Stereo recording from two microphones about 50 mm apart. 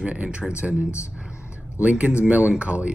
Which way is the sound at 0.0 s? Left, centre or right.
Right.